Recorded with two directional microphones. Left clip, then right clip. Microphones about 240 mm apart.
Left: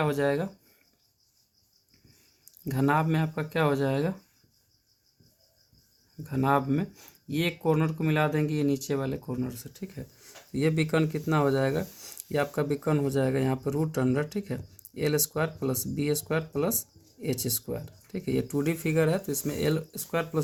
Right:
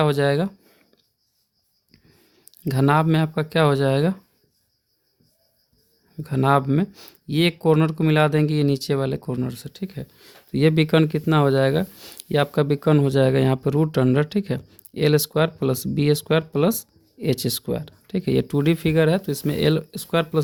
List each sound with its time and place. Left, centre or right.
0.0 s speech: right
2.4 s speech: right
6.2 s speech: right